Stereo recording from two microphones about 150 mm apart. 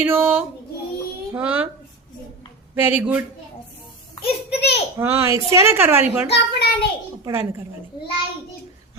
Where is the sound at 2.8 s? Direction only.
10° right (ahead or behind).